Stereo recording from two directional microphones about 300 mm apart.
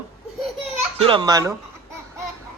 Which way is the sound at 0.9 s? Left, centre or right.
Centre.